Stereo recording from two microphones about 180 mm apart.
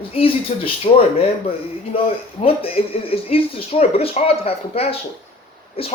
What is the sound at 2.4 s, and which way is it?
Speech, 30° left (ahead or behind).